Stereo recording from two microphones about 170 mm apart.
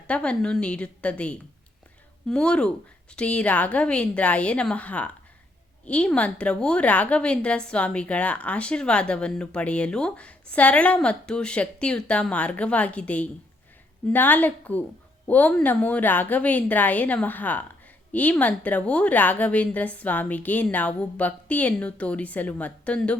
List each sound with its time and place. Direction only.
0.1 s a woman's voice: 5° left (ahead or behind)